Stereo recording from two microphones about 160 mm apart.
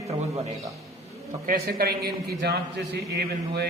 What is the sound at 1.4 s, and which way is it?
A man's voice, 65° right (ahead or behind).